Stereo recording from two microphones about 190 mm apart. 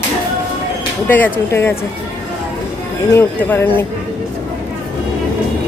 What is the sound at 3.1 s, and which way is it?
Speech, 10° left (ahead or behind).